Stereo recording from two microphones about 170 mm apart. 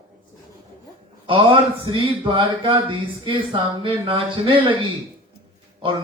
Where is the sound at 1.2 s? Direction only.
30° right (ahead or behind).